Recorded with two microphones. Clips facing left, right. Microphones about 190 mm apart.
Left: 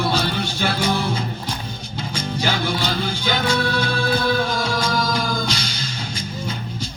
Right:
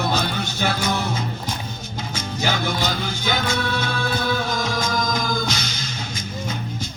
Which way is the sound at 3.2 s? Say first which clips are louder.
Left 2 dB; 30° left (ahead or behind).